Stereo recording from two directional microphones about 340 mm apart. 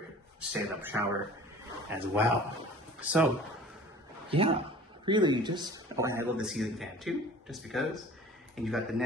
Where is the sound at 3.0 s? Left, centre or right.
Centre.